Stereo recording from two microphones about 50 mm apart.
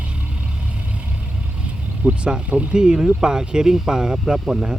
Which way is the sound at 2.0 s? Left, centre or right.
Right.